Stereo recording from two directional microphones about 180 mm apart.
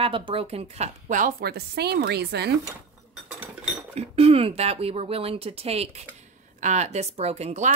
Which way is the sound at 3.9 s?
30° right (ahead or behind).